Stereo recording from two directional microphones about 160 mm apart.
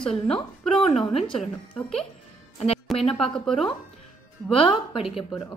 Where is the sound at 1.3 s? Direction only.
5° left (ahead or behind).